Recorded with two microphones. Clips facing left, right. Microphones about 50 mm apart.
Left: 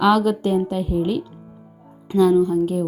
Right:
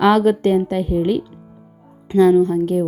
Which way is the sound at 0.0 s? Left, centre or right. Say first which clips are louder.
Right 3 dB; right.